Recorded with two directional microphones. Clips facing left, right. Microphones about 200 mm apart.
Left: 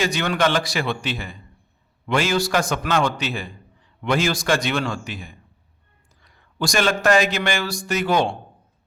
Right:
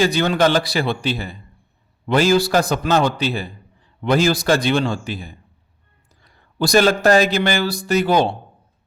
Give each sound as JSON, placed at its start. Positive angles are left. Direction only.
{"t": 0.0, "sound": "speech", "side_deg": -35}